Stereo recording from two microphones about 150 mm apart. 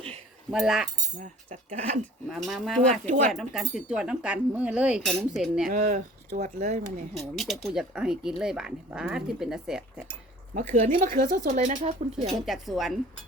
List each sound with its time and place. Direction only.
0.5 s speech: 5° right (ahead or behind)
1.2 s speech: 50° right (ahead or behind)
2.2 s speech: centre (ahead or behind)
2.8 s speech: 55° right (ahead or behind)
3.3 s speech: 5° right (ahead or behind)
5.9 s speech: 55° right (ahead or behind)
7.1 s speech: centre (ahead or behind)
10.5 s speech: 60° right (ahead or behind)
12.4 s speech: centre (ahead or behind)